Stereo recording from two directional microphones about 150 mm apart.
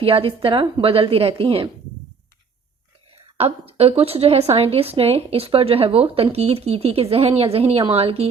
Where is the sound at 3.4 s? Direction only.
40° right (ahead or behind).